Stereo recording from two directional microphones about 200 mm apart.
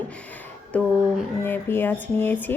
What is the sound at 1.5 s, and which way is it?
Speech, 10° left (ahead or behind).